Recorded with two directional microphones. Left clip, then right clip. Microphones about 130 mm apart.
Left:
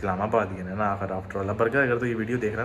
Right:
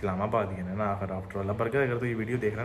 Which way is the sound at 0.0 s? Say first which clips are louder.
Left 4 dB; 25° right (ahead or behind).